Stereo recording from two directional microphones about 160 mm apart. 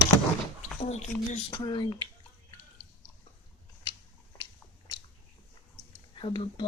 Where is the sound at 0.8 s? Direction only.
45° left (ahead or behind).